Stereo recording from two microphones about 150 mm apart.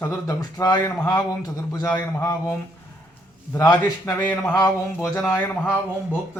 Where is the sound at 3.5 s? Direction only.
20° left (ahead or behind).